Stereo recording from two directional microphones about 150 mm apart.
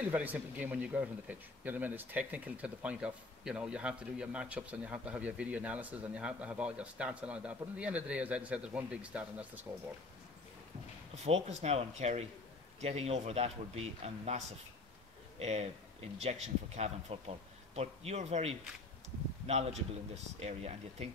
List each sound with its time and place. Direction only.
0.1 s speech: 10° right (ahead or behind)
11.2 s speech: 45° right (ahead or behind)